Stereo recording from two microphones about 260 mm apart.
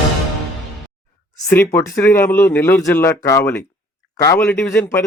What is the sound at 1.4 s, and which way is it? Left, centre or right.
A man's voice, centre.